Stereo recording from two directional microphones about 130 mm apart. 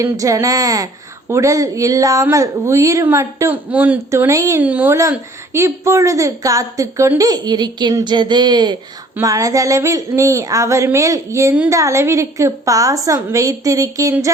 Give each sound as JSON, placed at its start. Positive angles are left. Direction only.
{"t": 0.0, "sound": "a woman's voice", "side_deg": -25}
{"t": 4.6, "sound": "a woman's voice", "side_deg": -15}